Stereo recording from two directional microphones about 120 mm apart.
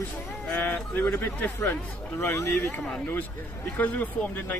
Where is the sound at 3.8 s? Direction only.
15° left (ahead or behind).